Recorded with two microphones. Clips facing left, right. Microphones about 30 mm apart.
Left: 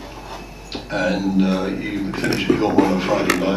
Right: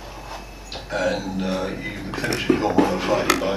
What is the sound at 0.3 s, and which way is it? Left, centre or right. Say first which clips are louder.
A man's voice: left 4 dB; centre.